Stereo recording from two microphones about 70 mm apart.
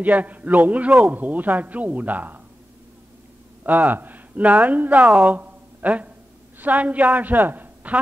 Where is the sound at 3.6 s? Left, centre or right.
Right.